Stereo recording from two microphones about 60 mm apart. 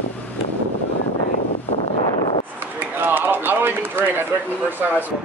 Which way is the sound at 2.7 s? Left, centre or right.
Right.